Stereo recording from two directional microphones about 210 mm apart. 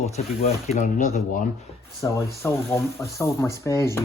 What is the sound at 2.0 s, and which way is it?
Speech, 20° left (ahead or behind).